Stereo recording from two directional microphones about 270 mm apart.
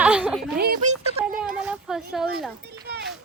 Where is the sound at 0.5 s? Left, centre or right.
Right.